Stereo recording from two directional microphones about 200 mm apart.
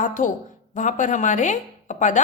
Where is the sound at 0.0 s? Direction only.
40° left (ahead or behind).